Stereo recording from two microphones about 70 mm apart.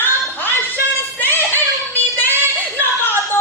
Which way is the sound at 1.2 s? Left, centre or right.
Left.